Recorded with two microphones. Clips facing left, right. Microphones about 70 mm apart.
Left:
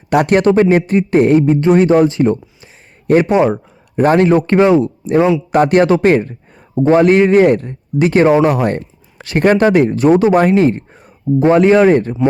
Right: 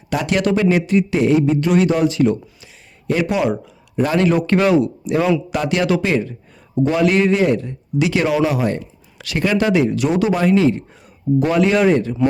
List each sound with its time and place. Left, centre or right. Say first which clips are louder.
0.1 s speech: left 7 dB; left
5.5 s speech: left 8 dB; left
8.5 s speech: left 4 dB; left